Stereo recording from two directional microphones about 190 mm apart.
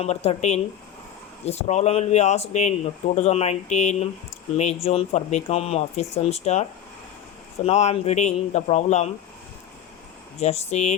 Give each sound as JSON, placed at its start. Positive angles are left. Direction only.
{"t": 0.0, "sound": "speech", "side_deg": 35}
{"t": 10.4, "sound": "speech", "side_deg": 35}